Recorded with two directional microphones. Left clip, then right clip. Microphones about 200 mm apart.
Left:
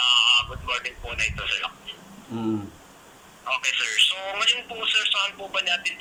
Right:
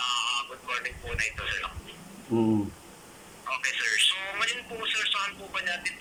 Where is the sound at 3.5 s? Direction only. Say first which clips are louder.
Left 3 dB; 10° left (ahead or behind).